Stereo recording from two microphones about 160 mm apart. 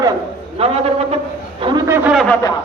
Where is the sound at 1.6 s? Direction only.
30° right (ahead or behind).